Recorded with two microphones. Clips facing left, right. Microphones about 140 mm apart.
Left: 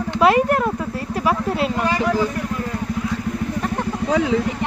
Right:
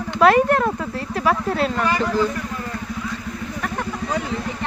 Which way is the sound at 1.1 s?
10° left (ahead or behind).